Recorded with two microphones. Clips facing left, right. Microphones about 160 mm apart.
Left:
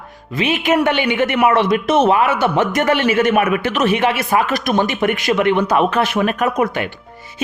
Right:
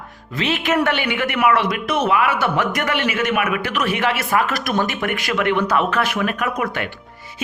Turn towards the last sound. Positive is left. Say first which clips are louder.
# left 5 dB
turn(degrees=20)  # may be behind; listen again after turning